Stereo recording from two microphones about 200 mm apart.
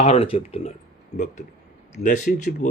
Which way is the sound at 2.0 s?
40° left (ahead or behind).